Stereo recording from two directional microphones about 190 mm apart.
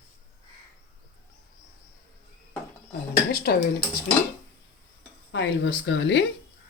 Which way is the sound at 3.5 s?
55° left (ahead or behind).